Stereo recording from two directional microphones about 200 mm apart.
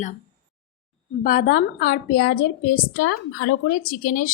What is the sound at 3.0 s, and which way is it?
Speech, 90° left.